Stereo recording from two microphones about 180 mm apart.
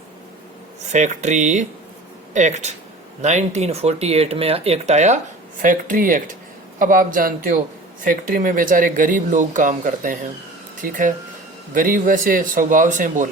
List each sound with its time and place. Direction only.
0.9 s speech: 40° right (ahead or behind)